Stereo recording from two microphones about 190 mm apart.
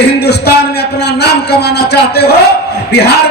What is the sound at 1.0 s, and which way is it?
A man's voice, 60° left (ahead or behind).